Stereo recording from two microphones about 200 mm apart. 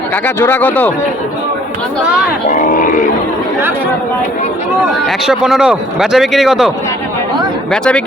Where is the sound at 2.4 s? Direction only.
40° left (ahead or behind).